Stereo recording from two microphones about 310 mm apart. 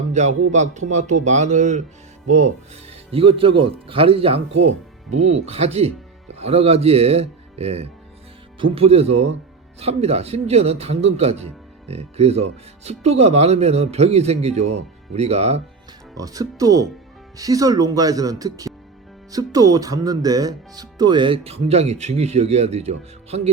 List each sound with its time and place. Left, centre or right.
0.1 s speech: right
3.1 s speech: centre